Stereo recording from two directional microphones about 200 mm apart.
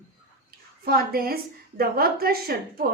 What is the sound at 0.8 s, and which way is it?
Speech, 50° right (ahead or behind).